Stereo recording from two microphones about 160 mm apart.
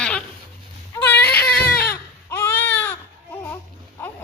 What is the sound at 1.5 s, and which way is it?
Baby cry, 80° left.